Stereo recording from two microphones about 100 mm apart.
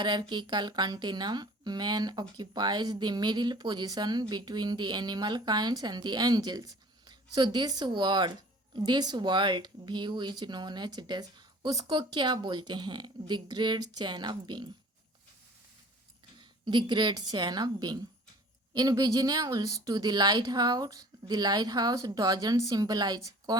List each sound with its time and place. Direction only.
0.0 s a woman's voice: 50° right (ahead or behind)
16.4 s a woman's voice: 50° right (ahead or behind)